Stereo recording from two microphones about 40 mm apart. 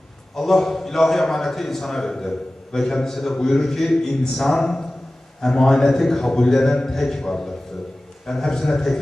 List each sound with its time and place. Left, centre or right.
0.3 s a man's voice: centre
4.6 s a man's voice: left